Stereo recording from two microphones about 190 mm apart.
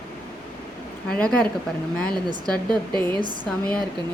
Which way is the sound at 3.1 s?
25° right (ahead or behind).